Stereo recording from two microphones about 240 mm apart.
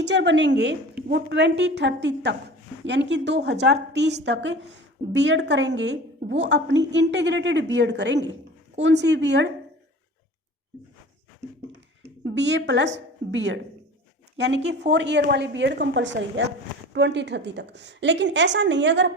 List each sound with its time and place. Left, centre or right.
0.0 s a woman's voice: right
12.2 s a woman's voice: right